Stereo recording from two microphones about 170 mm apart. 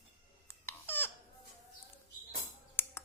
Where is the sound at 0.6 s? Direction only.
10° left (ahead or behind).